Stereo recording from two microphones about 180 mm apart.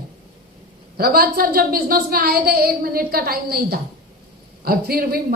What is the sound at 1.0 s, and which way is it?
A woman's voice, 55° right (ahead or behind).